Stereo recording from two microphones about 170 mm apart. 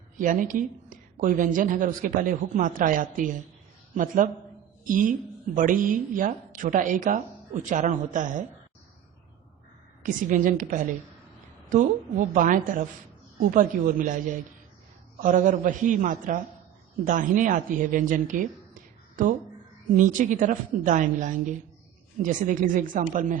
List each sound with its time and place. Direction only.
0.3 s a woman's voice: 50° right (ahead or behind)
10.0 s a woman's voice: 50° right (ahead or behind)
20.0 s a woman's voice: 50° right (ahead or behind)